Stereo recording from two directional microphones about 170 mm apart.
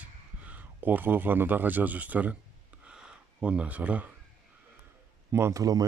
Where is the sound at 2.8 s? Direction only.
5° right (ahead or behind).